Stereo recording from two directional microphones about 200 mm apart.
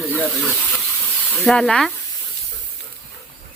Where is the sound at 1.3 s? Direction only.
5° left (ahead or behind).